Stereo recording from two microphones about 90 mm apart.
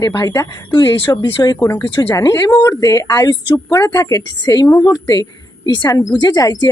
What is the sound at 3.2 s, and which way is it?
Speech, 50° left (ahead or behind).